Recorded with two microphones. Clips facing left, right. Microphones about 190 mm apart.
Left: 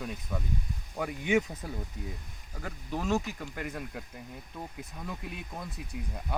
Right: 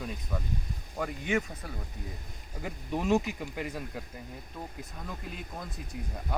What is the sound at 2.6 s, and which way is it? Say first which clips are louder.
Speech: right 2 dB; 10° right (ahead or behind).